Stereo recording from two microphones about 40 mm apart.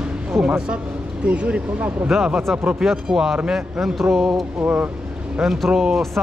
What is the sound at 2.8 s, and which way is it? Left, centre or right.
Speech, centre.